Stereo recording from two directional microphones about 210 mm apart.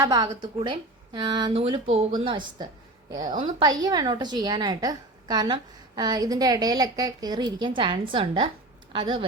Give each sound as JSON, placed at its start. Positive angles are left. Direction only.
{"t": 0.0, "sound": "a woman's voice", "side_deg": -15}